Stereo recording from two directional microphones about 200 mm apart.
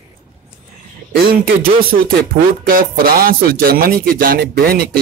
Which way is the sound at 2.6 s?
45° right (ahead or behind).